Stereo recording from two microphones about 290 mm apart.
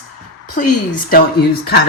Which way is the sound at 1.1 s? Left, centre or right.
Left.